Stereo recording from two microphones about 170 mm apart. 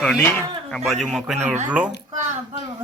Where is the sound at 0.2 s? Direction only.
10° left (ahead or behind).